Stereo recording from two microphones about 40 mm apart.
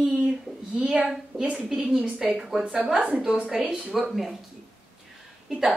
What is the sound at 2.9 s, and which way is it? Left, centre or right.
Speech, right.